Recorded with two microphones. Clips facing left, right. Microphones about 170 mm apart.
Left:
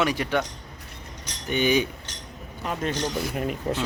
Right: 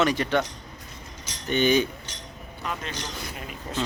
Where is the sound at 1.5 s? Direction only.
10° left (ahead or behind).